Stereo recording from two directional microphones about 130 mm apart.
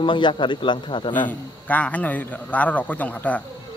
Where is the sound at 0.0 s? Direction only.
40° left (ahead or behind).